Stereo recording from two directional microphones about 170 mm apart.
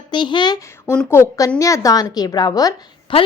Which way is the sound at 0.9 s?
15° left (ahead or behind).